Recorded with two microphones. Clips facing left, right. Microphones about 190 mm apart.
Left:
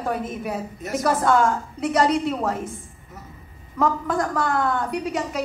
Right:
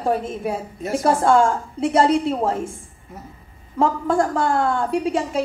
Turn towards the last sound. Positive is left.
turn(degrees=-30)  # may be behind; listen again after turning